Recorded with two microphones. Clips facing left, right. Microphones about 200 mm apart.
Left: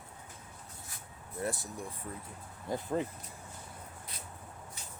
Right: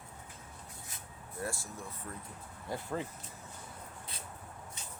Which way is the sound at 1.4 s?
20° left (ahead or behind).